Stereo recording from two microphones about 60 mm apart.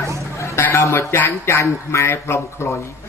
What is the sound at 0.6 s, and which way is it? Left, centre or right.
Music, left.